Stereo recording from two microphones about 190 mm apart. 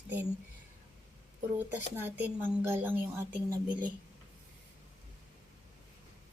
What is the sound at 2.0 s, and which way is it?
A woman's voice, 10° right (ahead or behind).